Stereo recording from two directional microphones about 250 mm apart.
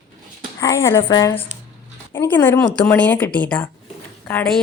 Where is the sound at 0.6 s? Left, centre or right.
Centre.